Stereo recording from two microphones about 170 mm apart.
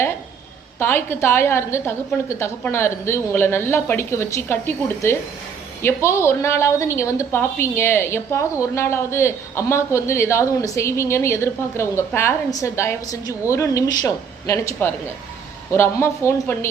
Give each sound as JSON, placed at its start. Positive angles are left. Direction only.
{"t": 0.8, "sound": "a woman's voice", "side_deg": 15}